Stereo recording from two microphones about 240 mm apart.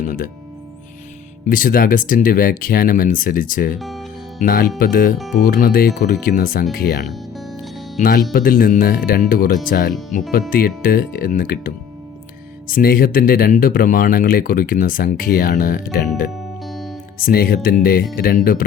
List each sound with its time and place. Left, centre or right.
0.0 s speech: left
1.5 s speech: left
3.8 s speech: centre
4.4 s speech: left
5.1 s speech: centre
5.4 s speech: left
7.1 s music: centre
8.0 s speech: left
16.6 s music: centre
17.2 s speech: left